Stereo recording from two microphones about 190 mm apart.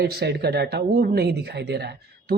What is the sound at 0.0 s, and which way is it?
A woman's voice, 60° right (ahead or behind).